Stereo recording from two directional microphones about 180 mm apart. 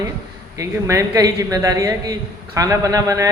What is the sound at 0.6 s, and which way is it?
A woman's voice, 15° right (ahead or behind).